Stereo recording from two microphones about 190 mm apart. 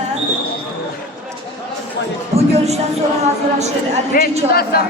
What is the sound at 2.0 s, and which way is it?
Speech, 65° left (ahead or behind).